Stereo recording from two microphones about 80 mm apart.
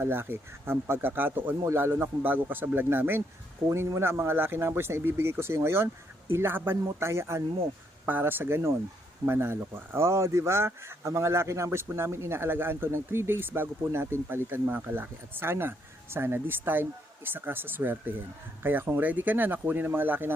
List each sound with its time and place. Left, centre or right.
0.0 s speech: right